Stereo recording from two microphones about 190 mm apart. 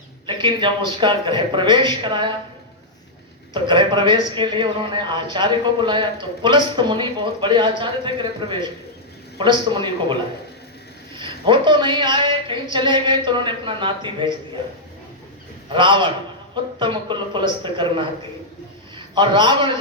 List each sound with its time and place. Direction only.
0.3 s a man's voice: 25° right (ahead or behind)
3.5 s a man's voice: 25° right (ahead or behind)
11.2 s a woman's voice: 25° right (ahead or behind)
15.7 s a man's voice: 25° right (ahead or behind)